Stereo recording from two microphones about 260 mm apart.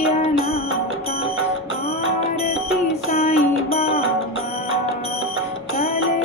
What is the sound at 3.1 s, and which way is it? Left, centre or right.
Music, left.